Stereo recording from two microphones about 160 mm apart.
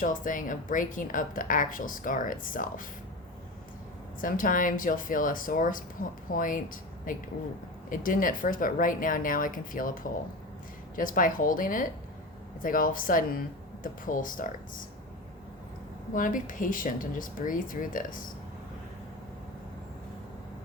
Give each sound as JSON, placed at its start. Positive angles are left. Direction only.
{"t": 0.0, "sound": "a woman's voice", "side_deg": 55}
{"t": 4.2, "sound": "a woman's voice", "side_deg": 55}
{"t": 16.1, "sound": "a woman's voice", "side_deg": 55}